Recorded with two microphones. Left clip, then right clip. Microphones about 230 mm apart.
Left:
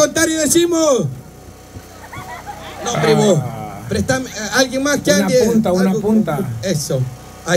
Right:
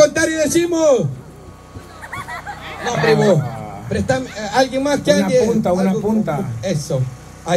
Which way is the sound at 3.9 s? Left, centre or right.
Left.